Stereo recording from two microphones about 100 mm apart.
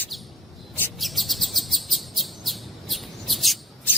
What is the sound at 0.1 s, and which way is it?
Bird, centre (ahead or behind).